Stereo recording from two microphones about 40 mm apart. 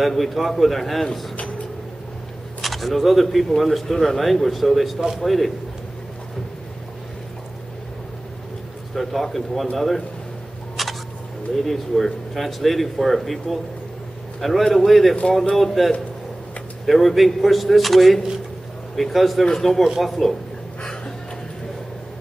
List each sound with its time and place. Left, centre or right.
0.0 s speech: centre
2.6 s speech: centre
8.9 s speech: centre
10.8 s a sound: centre
11.6 s a man's voice: centre
19.8 s speech: centre
20.8 s music: left